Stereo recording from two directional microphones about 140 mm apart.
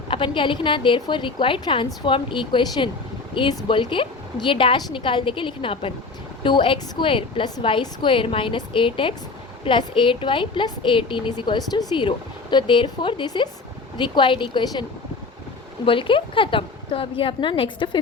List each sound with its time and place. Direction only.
0.1 s a woman's voice: 35° left (ahead or behind)
15.9 s a woman's voice: 40° left (ahead or behind)